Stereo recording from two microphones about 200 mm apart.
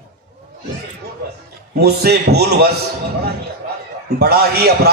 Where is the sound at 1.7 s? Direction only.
55° right (ahead or behind).